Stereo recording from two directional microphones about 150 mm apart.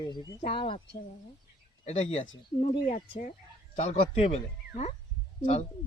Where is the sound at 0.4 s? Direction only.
35° left (ahead or behind).